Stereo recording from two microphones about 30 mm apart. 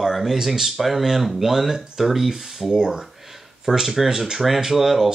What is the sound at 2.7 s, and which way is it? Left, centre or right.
Speech, right.